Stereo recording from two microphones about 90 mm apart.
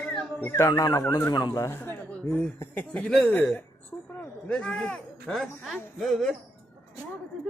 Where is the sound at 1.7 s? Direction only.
25° left (ahead or behind).